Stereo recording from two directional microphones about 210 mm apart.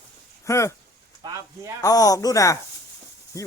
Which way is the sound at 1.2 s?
15° right (ahead or behind).